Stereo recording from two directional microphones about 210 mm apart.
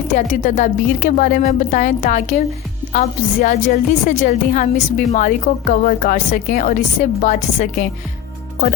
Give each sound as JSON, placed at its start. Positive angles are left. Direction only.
{"t": 0.1, "sound": "a woman's voice", "side_deg": 35}